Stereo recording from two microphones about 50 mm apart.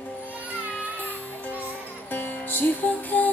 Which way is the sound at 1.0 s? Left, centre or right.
Left.